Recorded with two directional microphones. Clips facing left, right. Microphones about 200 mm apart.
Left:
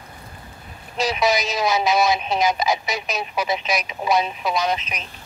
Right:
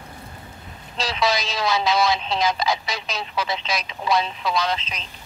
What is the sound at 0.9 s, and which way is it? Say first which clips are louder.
Speech: left 3 dB; 20° left (ahead or behind).